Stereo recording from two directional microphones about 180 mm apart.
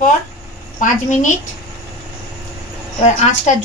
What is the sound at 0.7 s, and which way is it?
Speech, 45° left (ahead or behind).